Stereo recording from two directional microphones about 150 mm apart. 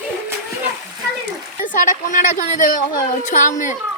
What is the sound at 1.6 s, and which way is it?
A woman's voice, 60° left (ahead or behind).